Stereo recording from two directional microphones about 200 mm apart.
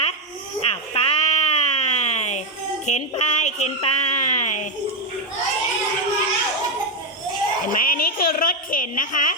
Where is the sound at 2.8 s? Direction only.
35° left (ahead or behind).